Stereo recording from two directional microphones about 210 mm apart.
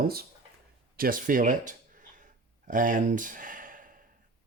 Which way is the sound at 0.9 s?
40° right (ahead or behind).